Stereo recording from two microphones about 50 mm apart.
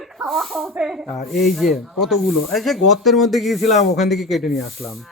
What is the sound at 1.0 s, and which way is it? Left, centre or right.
Speech, centre.